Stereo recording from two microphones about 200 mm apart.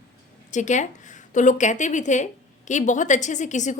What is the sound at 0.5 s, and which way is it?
A woman's voice, 35° left (ahead or behind).